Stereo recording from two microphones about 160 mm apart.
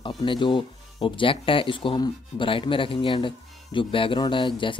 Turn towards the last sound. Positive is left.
turn(degrees=30)  # may be behind; listen again after turning